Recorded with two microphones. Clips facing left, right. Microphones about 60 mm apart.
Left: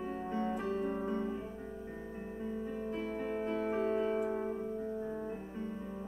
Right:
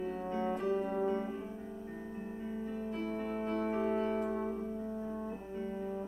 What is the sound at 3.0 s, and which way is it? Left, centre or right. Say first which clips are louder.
Piano: even; centre.